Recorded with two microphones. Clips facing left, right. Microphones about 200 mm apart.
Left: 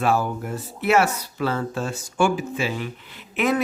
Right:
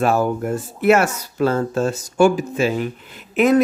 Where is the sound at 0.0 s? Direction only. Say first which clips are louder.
Right 4 dB; 45° right (ahead or behind).